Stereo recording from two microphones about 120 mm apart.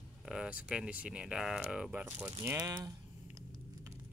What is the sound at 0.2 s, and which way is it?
Speech, 5° right (ahead or behind).